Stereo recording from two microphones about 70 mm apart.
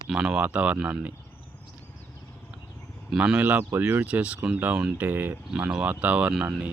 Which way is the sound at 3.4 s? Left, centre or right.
Right.